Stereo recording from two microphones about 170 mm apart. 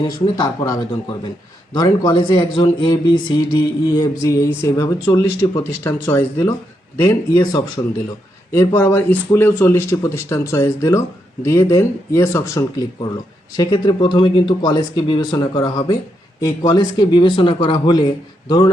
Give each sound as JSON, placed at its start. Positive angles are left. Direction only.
{"t": 0.0, "sound": "speech", "side_deg": 25}